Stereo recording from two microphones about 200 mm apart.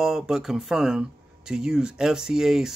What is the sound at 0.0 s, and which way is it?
Speech, 5° right (ahead or behind).